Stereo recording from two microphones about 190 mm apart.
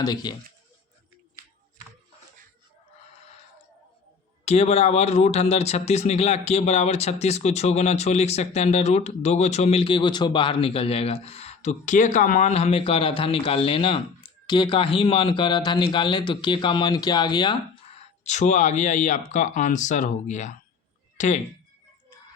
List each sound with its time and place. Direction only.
0.0 s speech: 20° left (ahead or behind)
4.4 s speech: 35° left (ahead or behind)
18.2 s speech: 40° left (ahead or behind)